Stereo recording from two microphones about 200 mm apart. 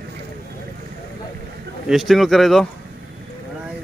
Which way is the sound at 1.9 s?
Centre (ahead or behind).